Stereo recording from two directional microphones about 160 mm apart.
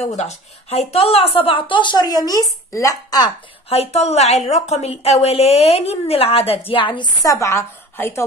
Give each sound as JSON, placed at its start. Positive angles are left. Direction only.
{"t": 0.0, "sound": "speech", "side_deg": 45}
{"t": 3.6, "sound": "a woman's voice", "side_deg": 40}